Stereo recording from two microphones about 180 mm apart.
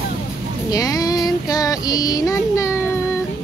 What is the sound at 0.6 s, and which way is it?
Child singing, 20° left (ahead or behind).